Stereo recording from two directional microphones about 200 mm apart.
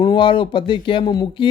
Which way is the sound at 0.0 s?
25° left (ahead or behind).